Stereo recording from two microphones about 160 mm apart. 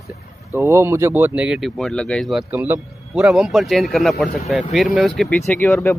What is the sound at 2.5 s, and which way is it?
Speech, 10° right (ahead or behind).